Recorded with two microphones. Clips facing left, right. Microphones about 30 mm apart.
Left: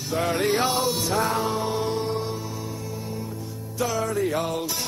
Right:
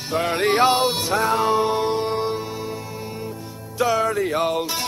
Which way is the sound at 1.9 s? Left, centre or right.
Right.